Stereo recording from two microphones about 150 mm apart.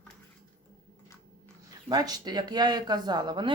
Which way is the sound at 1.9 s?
25° right (ahead or behind).